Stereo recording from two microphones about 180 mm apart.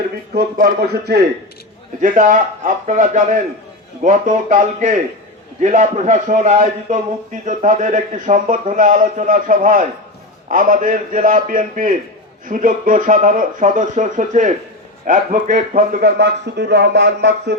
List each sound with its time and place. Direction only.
0.3 s speech: 55° right (ahead or behind)
2.0 s a man's voice: 45° right (ahead or behind); by 17.5 s 70° right (ahead or behind)